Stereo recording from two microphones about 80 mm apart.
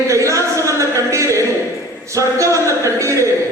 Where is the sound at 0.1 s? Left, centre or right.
Right.